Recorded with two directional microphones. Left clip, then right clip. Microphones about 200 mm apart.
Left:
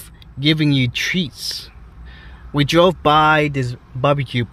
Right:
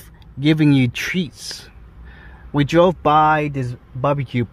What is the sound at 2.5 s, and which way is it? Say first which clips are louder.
Speech: left 1 dB; 5° right (ahead or behind).